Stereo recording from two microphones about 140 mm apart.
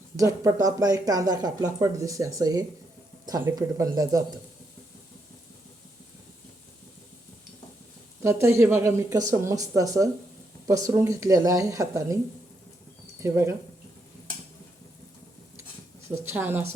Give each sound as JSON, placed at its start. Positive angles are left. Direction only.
{"t": 0.2, "sound": "speech", "side_deg": -25}
{"t": 8.2, "sound": "speech", "side_deg": -20}
{"t": 13.2, "sound": "a woman's voice", "side_deg": -20}
{"t": 16.1, "sound": "a woman's voice", "side_deg": -20}